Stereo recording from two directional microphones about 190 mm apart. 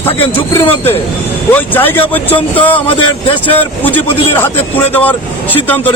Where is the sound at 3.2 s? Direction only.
30° left (ahead or behind).